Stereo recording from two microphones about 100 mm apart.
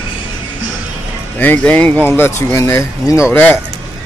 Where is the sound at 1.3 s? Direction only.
15° left (ahead or behind).